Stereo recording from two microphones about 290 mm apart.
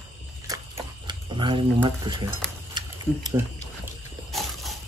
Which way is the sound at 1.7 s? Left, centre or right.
Centre.